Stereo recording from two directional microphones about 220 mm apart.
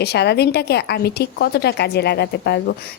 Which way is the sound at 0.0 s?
50° left (ahead or behind).